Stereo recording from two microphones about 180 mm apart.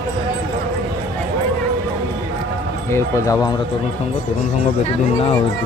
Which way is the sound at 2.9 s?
20° left (ahead or behind).